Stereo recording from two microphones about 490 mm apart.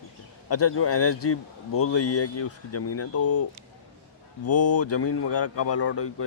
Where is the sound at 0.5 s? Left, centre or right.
Left.